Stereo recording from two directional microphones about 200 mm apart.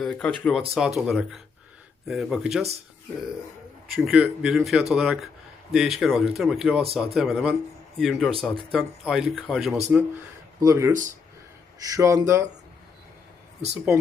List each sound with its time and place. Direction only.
0.0 s speech: 5° left (ahead or behind)
3.9 s speech: centre (ahead or behind)
10.6 s speech: 15° right (ahead or behind)